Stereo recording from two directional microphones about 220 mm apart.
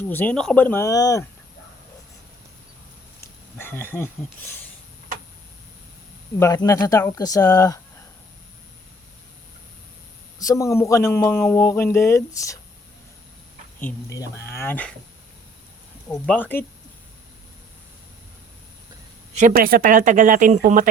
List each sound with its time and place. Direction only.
0.0 s a man's voice: 10° left (ahead or behind)
3.2 s speech: 10° left (ahead or behind)
6.4 s a man's voice: 15° left (ahead or behind)
10.3 s a man's voice: 15° left (ahead or behind)
13.7 s a man's voice: 10° left (ahead or behind)
16.0 s a man's voice: 5° left (ahead or behind)
19.3 s speech: 35° right (ahead or behind)